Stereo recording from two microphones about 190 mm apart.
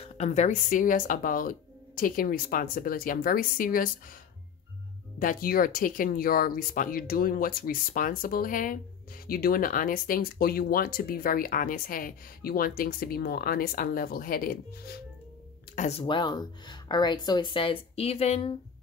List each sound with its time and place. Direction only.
0.0 s speech: 35° left (ahead or behind)
5.2 s speech: 45° left (ahead or behind)
15.7 s speech: 35° left (ahead or behind)